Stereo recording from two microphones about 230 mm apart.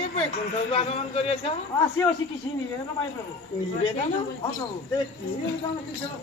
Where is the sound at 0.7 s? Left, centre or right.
Left.